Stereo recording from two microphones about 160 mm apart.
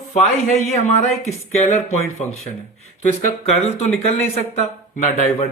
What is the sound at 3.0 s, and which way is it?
Speech, 45° left (ahead or behind).